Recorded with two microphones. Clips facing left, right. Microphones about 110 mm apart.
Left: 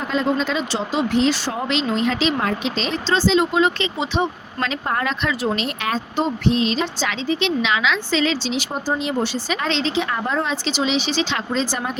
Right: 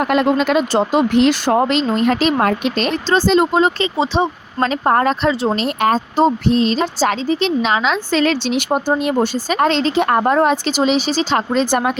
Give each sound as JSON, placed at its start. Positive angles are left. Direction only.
{"t": 0.0, "sound": "a woman's voice", "side_deg": -65}
{"t": 5.3, "sound": "a woman's voice", "side_deg": -30}
{"t": 11.5, "sound": "speech", "side_deg": -60}